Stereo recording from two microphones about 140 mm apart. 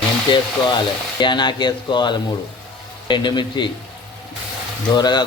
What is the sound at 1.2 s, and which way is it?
Speech, 35° left (ahead or behind).